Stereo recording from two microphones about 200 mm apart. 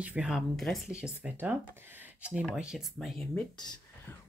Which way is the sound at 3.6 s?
20° left (ahead or behind).